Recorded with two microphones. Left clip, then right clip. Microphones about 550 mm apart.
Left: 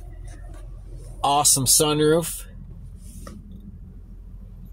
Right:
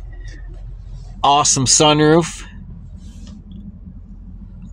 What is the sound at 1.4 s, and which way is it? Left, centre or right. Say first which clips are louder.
Speech: right 7 dB; left.